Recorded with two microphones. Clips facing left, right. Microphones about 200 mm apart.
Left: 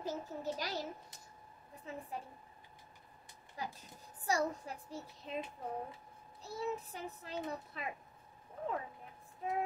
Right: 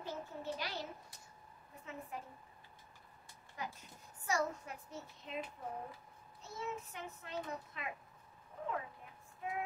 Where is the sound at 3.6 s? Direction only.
35° left (ahead or behind).